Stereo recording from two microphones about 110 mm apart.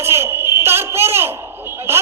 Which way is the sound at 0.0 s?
20° right (ahead or behind).